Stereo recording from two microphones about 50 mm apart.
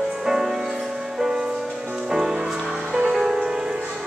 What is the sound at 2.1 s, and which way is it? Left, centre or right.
Music, centre.